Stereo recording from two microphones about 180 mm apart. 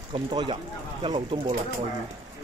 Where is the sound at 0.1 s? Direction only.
25° right (ahead or behind).